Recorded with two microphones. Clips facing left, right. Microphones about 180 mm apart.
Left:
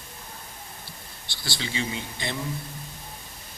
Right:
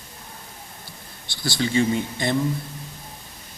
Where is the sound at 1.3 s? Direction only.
50° right (ahead or behind).